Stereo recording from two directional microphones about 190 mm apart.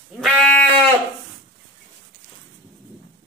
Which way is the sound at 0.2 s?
5° left (ahead or behind).